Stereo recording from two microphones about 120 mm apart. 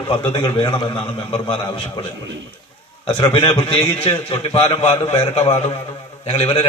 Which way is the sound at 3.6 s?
45° left (ahead or behind).